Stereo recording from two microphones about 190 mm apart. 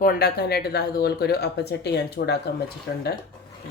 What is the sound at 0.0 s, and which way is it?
Speech, 50° left (ahead or behind).